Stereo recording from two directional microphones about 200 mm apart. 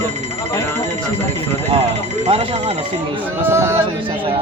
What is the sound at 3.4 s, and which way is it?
Speech, 15° right (ahead or behind).